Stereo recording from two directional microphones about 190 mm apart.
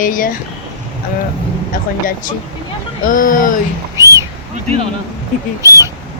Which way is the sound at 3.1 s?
45° left (ahead or behind).